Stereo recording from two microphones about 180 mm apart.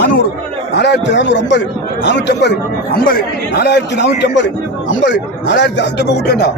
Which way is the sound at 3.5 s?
70° left (ahead or behind).